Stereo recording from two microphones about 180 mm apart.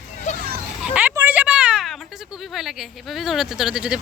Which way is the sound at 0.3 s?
40° left (ahead or behind).